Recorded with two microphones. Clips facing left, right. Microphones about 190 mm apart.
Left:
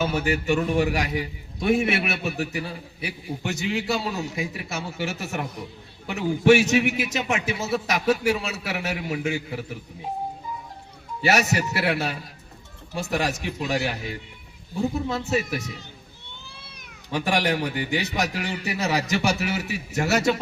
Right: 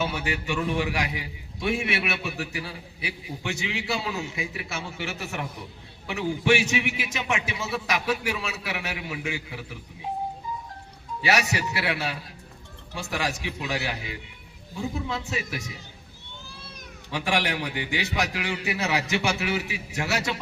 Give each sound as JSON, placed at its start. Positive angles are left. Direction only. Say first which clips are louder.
{"t": 0.0, "sound": "a man's voice", "louder": "left 5 dB", "side_deg": 45}
{"t": 11.2, "sound": "a man's voice", "louder": "left 3 dB", "side_deg": 45}
{"t": 17.1, "sound": "a man's voice", "louder": "left 3 dB", "side_deg": 40}